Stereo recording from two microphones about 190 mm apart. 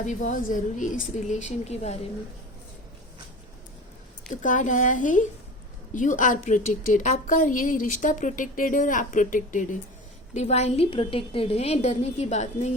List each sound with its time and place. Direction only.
0.0 s a woman's voice: 40° left (ahead or behind)
4.3 s a woman's voice: 40° left (ahead or behind)